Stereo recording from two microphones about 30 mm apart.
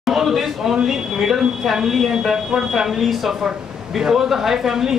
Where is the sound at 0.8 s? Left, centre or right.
Centre.